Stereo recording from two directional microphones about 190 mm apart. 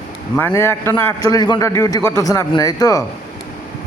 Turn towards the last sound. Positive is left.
turn(degrees=20)  # may be behind; listen again after turning